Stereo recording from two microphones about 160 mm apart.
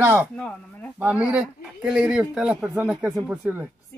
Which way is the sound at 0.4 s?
10° left (ahead or behind).